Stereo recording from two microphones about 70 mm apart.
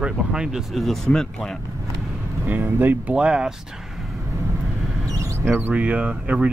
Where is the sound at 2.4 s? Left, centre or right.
Right.